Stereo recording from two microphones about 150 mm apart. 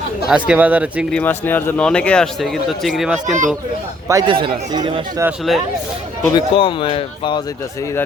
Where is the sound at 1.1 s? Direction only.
10° left (ahead or behind); by 3.2 s 5° right (ahead or behind).